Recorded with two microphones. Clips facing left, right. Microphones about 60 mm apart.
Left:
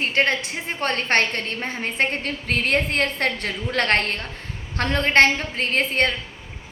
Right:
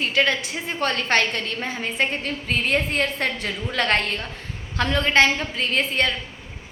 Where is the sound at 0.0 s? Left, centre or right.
Left.